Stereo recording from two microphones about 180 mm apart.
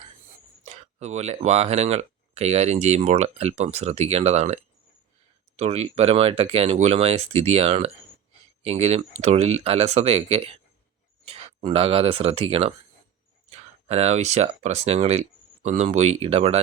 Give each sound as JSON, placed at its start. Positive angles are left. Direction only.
{"t": 0.6, "sound": "speech", "side_deg": -40}